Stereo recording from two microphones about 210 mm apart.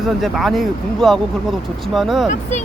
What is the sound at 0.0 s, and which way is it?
Speech, centre (ahead or behind).